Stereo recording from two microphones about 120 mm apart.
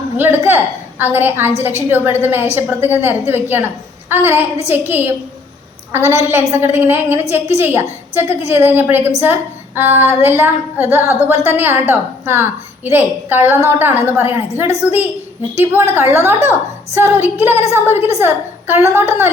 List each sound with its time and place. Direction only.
0.2 s a woman's voice: 15° right (ahead or behind)